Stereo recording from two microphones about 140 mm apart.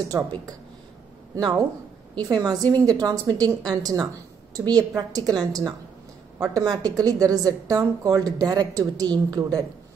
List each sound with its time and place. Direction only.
0.1 s a woman's voice: 20° right (ahead or behind)
1.3 s a woman's voice: 25° right (ahead or behind)